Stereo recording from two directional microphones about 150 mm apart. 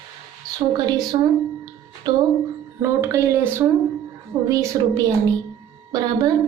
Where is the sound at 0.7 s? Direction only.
30° right (ahead or behind).